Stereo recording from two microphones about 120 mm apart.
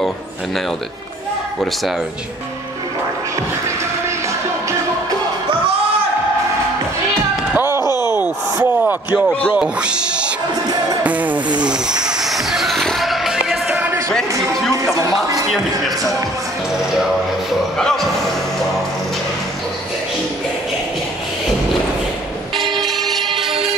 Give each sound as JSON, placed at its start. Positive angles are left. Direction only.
{"t": 7.5, "sound": "a sound", "side_deg": -20}
{"t": 9.5, "sound": "speech", "side_deg": -10}
{"t": 11.1, "sound": "music", "side_deg": -15}
{"t": 15.0, "sound": "speech", "side_deg": -30}
{"t": 17.5, "sound": "music", "side_deg": 5}
{"t": 22.8, "sound": "vehicle", "side_deg": 0}